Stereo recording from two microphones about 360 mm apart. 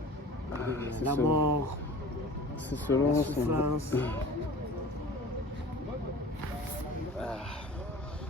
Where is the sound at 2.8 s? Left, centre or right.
Centre.